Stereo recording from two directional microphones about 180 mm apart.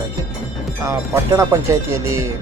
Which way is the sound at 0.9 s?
15° right (ahead or behind).